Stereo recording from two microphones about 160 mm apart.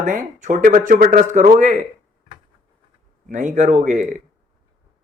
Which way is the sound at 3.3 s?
50° right (ahead or behind).